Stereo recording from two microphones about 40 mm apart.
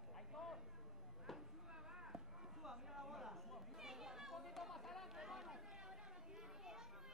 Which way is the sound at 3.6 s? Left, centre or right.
Centre.